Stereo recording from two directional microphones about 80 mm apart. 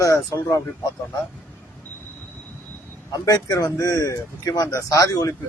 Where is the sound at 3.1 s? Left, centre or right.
Left.